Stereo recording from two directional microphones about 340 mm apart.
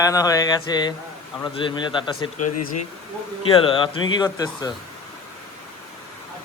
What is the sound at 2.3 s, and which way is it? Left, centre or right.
Speech, left.